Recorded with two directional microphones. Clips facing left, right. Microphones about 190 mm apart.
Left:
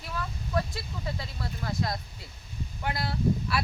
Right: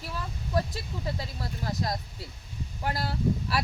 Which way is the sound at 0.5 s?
35° right (ahead or behind).